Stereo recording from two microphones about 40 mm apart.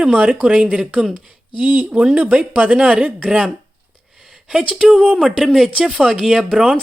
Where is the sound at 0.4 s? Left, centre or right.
Right.